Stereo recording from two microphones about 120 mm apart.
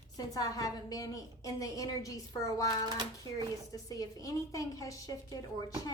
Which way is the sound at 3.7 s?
30° left (ahead or behind).